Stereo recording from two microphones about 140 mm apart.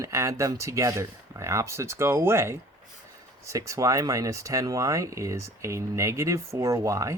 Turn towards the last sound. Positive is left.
turn(degrees=-20)  # may be behind; listen again after turning